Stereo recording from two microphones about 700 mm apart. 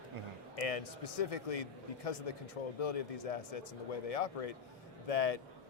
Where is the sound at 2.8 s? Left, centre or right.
Left.